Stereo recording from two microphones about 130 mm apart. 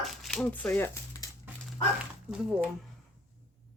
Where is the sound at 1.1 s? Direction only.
25° left (ahead or behind).